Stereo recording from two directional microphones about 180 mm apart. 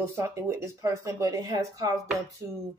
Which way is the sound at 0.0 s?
15° right (ahead or behind).